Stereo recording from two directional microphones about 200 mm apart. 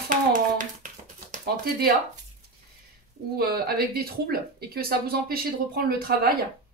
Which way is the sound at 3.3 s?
50° right (ahead or behind).